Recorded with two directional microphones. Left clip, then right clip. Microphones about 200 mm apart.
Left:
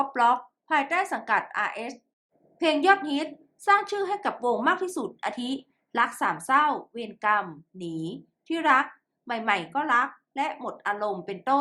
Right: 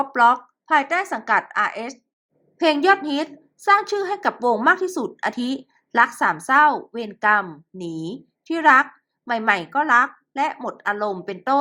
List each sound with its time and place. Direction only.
0.0 s a woman's voice: 25° right (ahead or behind)